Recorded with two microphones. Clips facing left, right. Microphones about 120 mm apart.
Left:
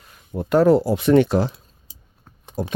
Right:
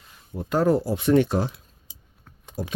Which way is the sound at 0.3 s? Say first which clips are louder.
Left 6 dB; 70° left (ahead or behind).